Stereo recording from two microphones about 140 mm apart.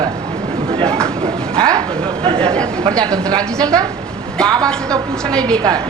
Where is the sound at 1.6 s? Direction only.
30° right (ahead or behind).